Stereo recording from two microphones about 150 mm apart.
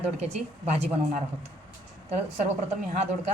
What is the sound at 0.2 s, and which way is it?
A woman's voice, 45° right (ahead or behind).